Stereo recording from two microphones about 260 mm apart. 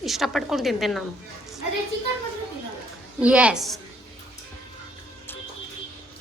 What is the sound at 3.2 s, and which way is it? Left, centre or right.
Speech, centre.